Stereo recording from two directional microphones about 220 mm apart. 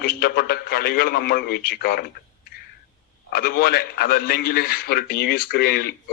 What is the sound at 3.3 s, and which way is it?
A man's voice, 45° left (ahead or behind).